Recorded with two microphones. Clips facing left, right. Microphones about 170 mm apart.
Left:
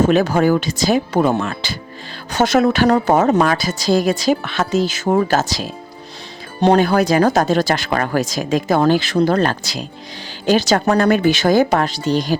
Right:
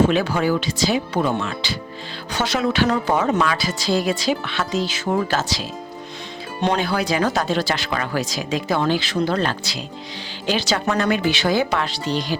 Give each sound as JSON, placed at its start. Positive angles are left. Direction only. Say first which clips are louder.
{"t": 0.0, "sound": "a woman's voice", "louder": "left 4 dB", "side_deg": 45}